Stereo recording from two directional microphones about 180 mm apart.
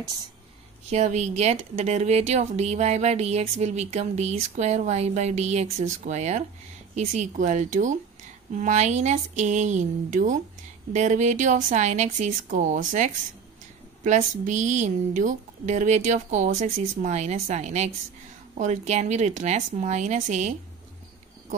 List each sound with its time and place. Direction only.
0.8 s speech: 40° right (ahead or behind)